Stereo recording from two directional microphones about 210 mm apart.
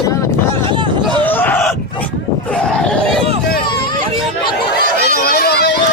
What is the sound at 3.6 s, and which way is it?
Vehicle, 20° left (ahead or behind).